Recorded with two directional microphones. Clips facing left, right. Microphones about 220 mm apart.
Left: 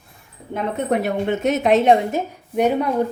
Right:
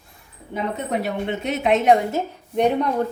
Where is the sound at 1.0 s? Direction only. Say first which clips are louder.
Left 5 dB; 45° left (ahead or behind).